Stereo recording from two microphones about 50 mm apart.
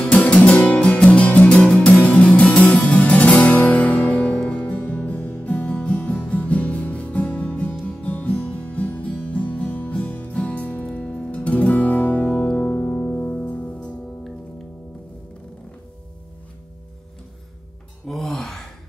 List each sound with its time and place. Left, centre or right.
0.0 s music: left
12.7 s music: left
18.0 s sigh: centre